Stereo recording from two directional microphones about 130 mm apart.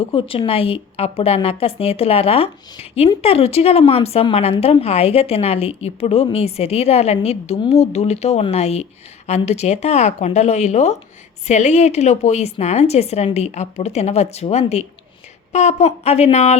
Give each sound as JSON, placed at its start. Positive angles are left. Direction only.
{"t": 0.0, "sound": "a woman's voice", "side_deg": 45}